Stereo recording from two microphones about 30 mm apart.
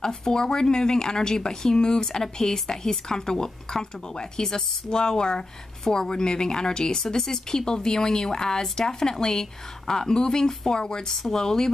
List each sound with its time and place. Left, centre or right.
0.0 s speech: left